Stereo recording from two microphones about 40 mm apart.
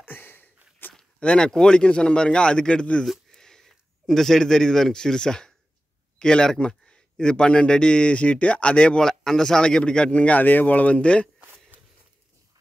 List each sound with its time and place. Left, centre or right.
0.0 s sniff: left
1.2 s speech: left
3.3 s a sound: centre
4.1 s a man's voice: centre; by 9.0 s left
9.0 s speech: centre; by 10.4 s left
10.4 s speech: left
11.7 s a sound: right